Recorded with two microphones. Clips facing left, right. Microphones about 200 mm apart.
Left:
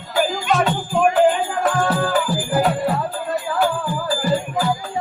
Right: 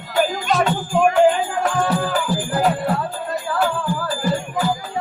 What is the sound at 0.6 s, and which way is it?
Music, centre (ahead or behind).